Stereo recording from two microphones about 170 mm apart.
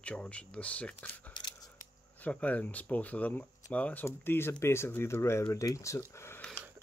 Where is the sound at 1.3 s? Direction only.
25° left (ahead or behind).